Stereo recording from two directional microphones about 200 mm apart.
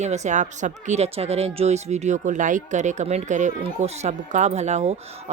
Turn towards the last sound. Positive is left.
turn(degrees=-35)  # may be behind; listen again after turning